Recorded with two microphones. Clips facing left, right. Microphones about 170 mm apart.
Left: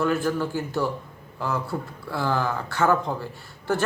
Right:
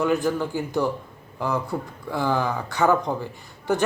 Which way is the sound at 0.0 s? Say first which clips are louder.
Right 1 dB; 15° right (ahead or behind).